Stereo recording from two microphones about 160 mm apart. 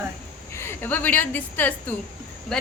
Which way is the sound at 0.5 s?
15° left (ahead or behind).